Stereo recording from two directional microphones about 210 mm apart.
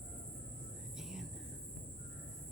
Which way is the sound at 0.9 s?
Centre (ahead or behind).